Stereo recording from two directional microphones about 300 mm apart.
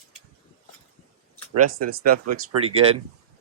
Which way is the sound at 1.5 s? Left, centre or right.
Right.